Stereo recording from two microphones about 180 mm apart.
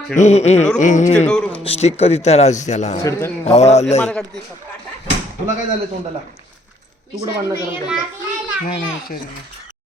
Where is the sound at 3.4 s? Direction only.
40° left (ahead or behind).